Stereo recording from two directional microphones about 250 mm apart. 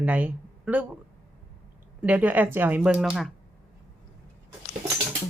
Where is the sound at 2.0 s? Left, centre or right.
Centre.